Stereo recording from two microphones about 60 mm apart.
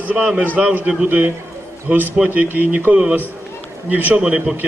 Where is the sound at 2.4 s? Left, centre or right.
Right.